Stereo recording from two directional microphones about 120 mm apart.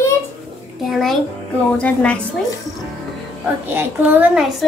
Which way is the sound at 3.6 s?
15° right (ahead or behind).